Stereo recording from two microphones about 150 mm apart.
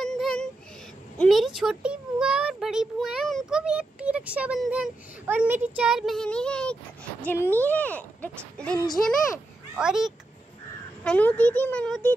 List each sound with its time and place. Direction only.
0.0 s a sound: 5° left (ahead or behind)
1.2 s a child's voice: centre (ahead or behind)
9.8 s a child's voice: 5° right (ahead or behind)
11.1 s speech: 10° left (ahead or behind)